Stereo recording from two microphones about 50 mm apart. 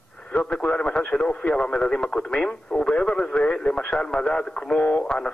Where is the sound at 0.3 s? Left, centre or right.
Left.